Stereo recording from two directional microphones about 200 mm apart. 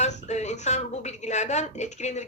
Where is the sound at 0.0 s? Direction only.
35° left (ahead or behind).